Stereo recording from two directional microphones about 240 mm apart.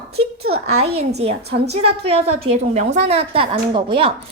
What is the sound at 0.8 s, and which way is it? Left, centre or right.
A woman's voice, right.